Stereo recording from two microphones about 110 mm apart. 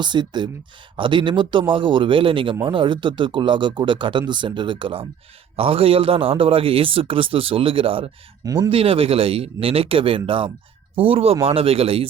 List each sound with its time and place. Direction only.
0.0 s a man's voice: 45° right (ahead or behind)